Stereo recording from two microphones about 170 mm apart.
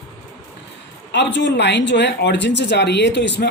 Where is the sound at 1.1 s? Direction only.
90° left.